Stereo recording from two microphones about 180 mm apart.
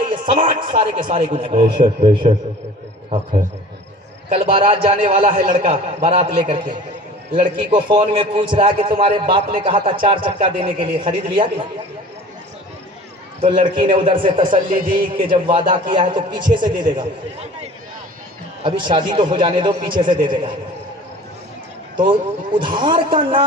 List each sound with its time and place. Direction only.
0.0 s a man's voice: 25° right (ahead or behind)
4.3 s a man's voice: 30° right (ahead or behind)
13.4 s a man's voice: 25° right (ahead or behind)
14.5 s speech: 50° right (ahead or behind)
15.1 s a man's voice: 25° right (ahead or behind)
18.6 s a man's voice: 25° right (ahead or behind)
22.5 s a man's voice: 25° right (ahead or behind)